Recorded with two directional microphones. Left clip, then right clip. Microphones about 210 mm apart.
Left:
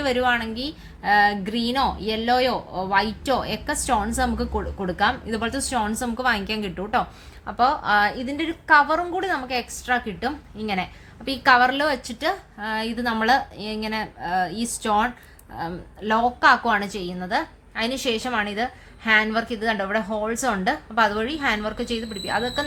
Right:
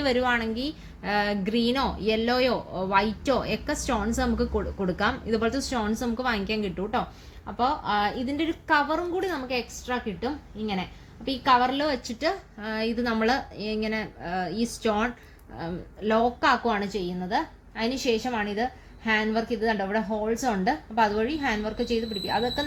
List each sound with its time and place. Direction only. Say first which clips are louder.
0.0 s a woman's voice: left 3 dB; 5° left (ahead or behind)